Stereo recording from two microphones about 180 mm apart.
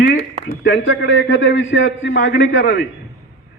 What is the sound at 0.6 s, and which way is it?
A man's voice, 85° left.